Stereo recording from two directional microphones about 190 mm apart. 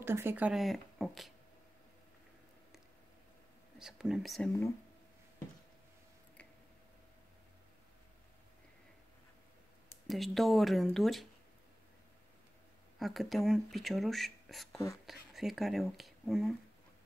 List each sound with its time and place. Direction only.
0.0 s speech: 10° right (ahead or behind)
3.7 s speech: centre (ahead or behind)
10.0 s speech: centre (ahead or behind)
13.0 s speech: centre (ahead or behind)